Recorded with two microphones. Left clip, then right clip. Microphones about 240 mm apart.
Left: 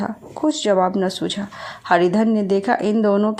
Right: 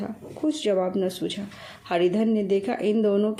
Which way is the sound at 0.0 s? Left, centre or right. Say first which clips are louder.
Left 7 dB; centre.